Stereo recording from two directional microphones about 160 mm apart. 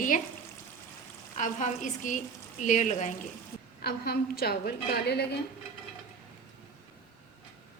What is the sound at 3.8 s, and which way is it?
A woman's voice, 80° left.